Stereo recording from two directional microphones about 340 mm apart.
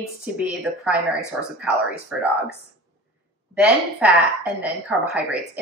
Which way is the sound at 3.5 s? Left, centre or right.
Centre.